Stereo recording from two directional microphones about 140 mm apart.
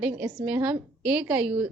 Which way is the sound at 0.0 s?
10° right (ahead or behind).